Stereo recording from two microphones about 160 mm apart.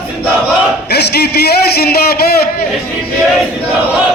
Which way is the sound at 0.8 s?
90° left.